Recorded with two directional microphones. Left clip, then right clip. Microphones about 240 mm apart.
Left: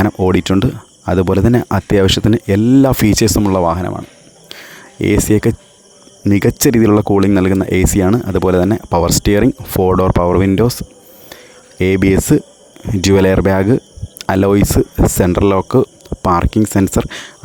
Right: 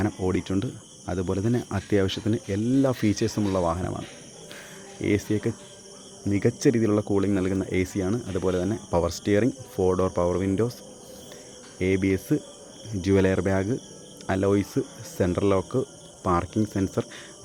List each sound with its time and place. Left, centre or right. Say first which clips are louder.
0.0 s speech: left 13 dB; left